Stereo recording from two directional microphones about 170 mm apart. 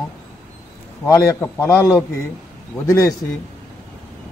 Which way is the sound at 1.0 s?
20° left (ahead or behind).